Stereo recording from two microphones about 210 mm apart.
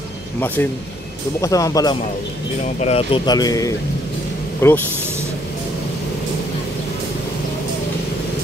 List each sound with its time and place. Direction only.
0.6 s speech: 10° left (ahead or behind)
2.8 s speech: 30° left (ahead or behind); by 4.8 s 10° left (ahead or behind)